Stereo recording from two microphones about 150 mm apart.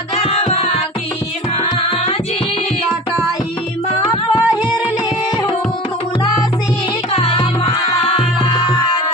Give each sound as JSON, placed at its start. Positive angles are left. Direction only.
{"t": 0.2, "sound": "music", "side_deg": 40}
{"t": 4.0, "sound": "music", "side_deg": 30}
{"t": 7.1, "sound": "music", "side_deg": 40}